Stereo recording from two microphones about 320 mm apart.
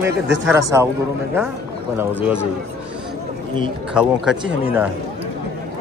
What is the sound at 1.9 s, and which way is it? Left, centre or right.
Speech, centre.